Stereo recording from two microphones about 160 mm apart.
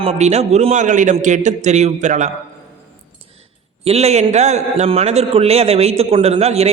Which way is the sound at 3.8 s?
40° right (ahead or behind).